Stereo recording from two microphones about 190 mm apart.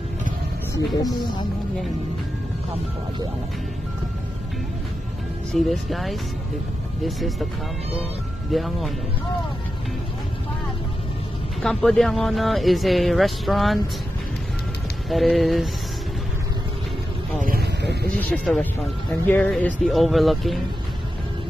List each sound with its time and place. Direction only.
5.5 s speech: centre (ahead or behind)
8.5 s speech: centre (ahead or behind)
11.6 s speech: 5° left (ahead or behind)
15.0 s speech: centre (ahead or behind)
17.4 s a sound: 55° right (ahead or behind)
18.3 s speech: 5° left (ahead or behind)